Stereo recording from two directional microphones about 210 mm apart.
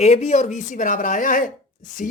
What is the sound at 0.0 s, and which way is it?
Speech, 30° left (ahead or behind).